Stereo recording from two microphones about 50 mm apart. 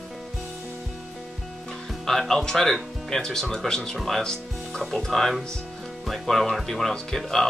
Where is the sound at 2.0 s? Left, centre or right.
Centre.